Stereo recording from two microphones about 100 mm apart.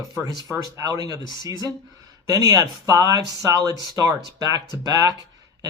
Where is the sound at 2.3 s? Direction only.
35° right (ahead or behind).